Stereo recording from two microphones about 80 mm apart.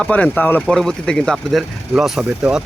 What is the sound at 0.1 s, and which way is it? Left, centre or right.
Speech, centre.